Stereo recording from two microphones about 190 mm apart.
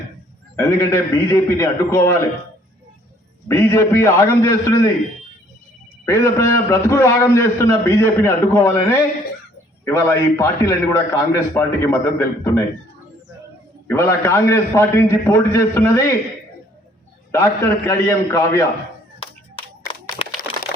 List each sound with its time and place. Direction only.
0.6 s a man's voice: 15° left (ahead or behind)
3.5 s a man's voice: 15° left (ahead or behind)
6.1 s a man's voice: 15° left (ahead or behind)
13.8 s a man's voice: 15° left (ahead or behind)
17.3 s a man's voice: 15° left (ahead or behind)
20.2 s typing: 30° left (ahead or behind)